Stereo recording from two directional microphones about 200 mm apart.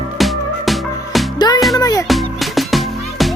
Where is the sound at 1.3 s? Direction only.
20° left (ahead or behind).